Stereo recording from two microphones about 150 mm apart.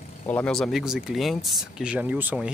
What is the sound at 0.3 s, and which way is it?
Speech, 5° left (ahead or behind).